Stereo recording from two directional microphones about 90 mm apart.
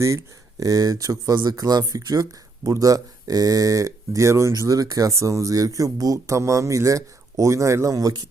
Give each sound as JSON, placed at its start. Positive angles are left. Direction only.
{"t": 0.0, "sound": "speech", "side_deg": -35}